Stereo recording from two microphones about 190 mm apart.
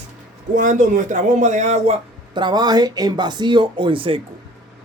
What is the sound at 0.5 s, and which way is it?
Speech, 40° right (ahead or behind).